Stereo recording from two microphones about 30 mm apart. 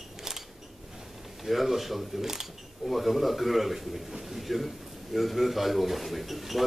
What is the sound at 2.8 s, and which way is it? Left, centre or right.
Speech, centre.